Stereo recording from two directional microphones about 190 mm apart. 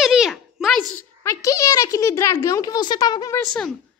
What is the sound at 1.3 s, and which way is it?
A child's voice, 15° left (ahead or behind).